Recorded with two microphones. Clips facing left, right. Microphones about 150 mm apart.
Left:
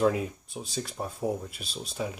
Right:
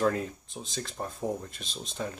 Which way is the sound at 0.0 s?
10° left (ahead or behind).